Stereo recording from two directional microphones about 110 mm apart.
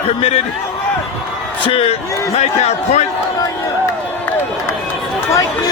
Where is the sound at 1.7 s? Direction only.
60° left (ahead or behind).